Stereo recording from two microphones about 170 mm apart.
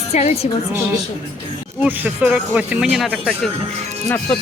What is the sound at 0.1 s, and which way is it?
Speech, 40° left (ahead or behind).